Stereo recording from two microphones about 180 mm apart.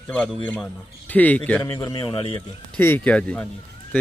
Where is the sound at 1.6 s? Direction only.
20° left (ahead or behind).